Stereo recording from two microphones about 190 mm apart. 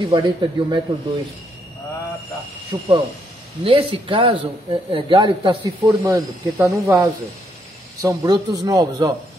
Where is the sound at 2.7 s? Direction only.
20° right (ahead or behind).